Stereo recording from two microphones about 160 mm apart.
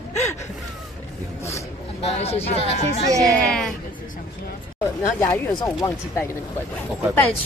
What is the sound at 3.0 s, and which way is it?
Speech, 20° right (ahead or behind).